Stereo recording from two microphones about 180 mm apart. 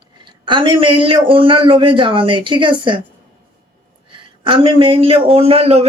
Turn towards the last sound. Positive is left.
turn(degrees=-35)  # may be behind; listen again after turning